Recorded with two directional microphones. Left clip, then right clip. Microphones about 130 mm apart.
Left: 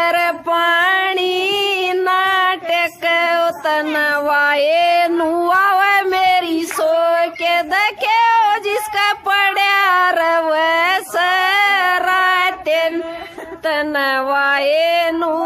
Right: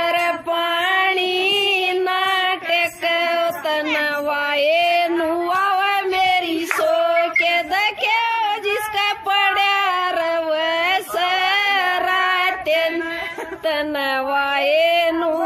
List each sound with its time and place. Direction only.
0.0 s child singing: 35° left (ahead or behind)
5.1 s child singing: 45° left (ahead or behind); by 12.9 s 30° left (ahead or behind)
13.7 s female singing: 25° left (ahead or behind)